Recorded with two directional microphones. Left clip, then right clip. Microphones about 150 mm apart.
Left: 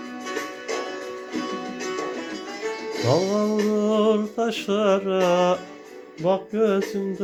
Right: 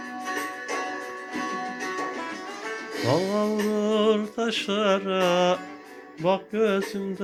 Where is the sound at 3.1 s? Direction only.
10° left (ahead or behind).